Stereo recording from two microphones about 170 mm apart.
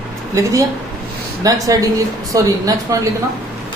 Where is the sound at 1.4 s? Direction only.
20° right (ahead or behind).